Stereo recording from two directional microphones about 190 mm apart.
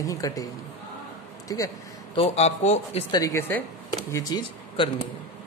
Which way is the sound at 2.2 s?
35° left (ahead or behind).